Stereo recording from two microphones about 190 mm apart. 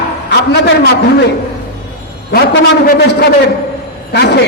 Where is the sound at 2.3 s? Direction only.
55° left (ahead or behind).